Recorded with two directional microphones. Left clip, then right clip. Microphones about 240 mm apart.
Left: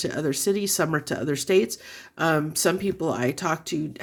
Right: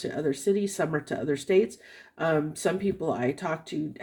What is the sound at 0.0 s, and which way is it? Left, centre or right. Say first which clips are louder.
Speech: left 2 dB; left.